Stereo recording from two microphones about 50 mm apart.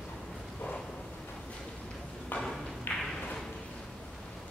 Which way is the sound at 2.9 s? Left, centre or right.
Left.